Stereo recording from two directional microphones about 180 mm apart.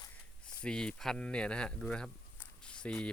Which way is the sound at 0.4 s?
5° left (ahead or behind).